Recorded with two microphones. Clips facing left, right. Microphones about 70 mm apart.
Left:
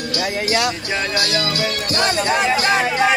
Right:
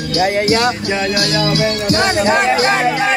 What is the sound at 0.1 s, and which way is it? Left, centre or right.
Speech, right.